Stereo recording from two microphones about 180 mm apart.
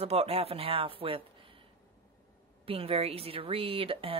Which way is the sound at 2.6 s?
30° right (ahead or behind).